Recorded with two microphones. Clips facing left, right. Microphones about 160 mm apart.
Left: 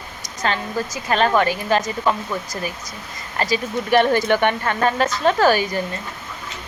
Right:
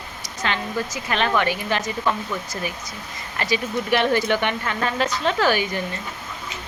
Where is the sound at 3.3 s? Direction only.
40° left (ahead or behind).